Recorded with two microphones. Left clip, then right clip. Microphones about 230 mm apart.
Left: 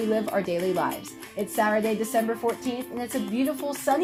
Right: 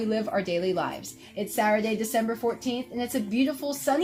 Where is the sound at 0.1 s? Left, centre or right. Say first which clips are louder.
Even; centre.